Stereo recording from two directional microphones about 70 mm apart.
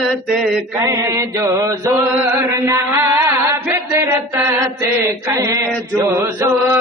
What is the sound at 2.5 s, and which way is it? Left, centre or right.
Chant, right.